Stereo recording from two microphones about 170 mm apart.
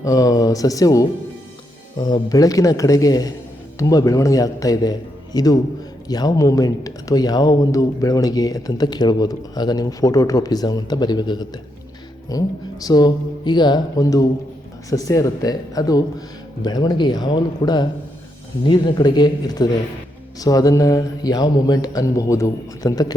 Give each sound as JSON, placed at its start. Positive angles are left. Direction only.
{"t": 0.0, "sound": "speech", "side_deg": 20}